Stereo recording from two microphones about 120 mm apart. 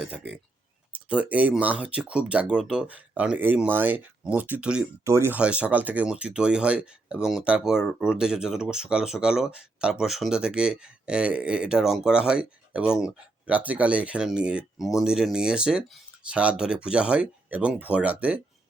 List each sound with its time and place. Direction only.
0.0 s speech: 10° right (ahead or behind)
5.0 s speech: 20° right (ahead or behind)
5.4 s speech: 10° right (ahead or behind)